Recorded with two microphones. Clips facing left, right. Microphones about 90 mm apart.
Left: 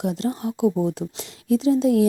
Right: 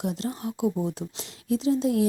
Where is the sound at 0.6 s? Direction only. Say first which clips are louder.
Left 6 dB; 85° left.